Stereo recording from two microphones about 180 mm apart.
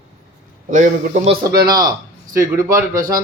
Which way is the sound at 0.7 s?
45° right (ahead or behind).